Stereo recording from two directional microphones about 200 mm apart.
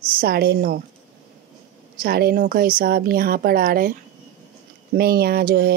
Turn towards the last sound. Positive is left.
turn(degrees=-50)  # may be behind; listen again after turning